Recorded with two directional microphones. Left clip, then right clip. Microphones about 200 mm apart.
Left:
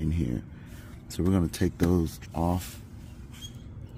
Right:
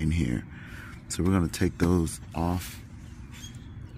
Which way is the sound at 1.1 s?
15° left (ahead or behind).